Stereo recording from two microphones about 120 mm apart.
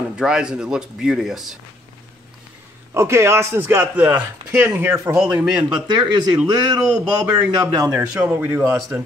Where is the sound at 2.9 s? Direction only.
20° right (ahead or behind).